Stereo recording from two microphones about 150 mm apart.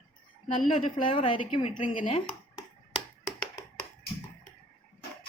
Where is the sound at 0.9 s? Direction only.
35° left (ahead or behind).